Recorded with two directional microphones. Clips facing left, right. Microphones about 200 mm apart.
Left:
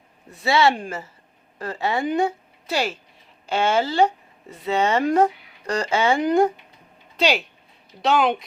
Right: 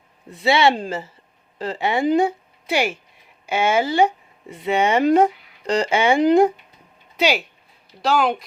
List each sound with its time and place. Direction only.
0.3 s a woman's voice: 15° right (ahead or behind)
7.2 s speech: 5° right (ahead or behind)